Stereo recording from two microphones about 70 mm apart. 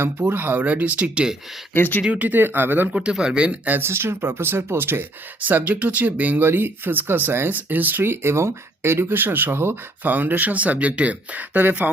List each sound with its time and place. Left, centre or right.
0.0 s speech: right; by 1.4 s centre
1.7 s speech: left
2.0 s speech: right
2.9 s speech: centre
3.8 s speech: right
5.5 s speech: right